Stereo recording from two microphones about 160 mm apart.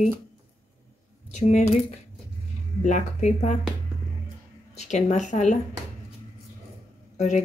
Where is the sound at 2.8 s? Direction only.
50° left (ahead or behind).